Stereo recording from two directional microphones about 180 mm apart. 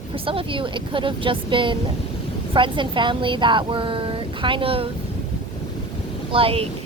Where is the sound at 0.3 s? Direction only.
30° right (ahead or behind).